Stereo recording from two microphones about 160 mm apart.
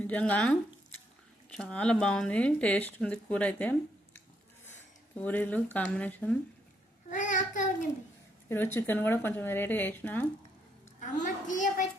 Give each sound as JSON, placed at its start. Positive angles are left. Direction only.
{"t": 0.0, "sound": "speech", "side_deg": 10}
{"t": 7.1, "sound": "child singing", "side_deg": 50}
{"t": 8.4, "sound": "speech", "side_deg": 15}
{"t": 11.0, "sound": "a woman's voice", "side_deg": 50}